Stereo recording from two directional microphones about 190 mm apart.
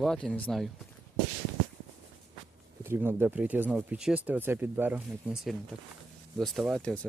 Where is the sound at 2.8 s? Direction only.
10° right (ahead or behind); by 7.1 s 5° left (ahead or behind).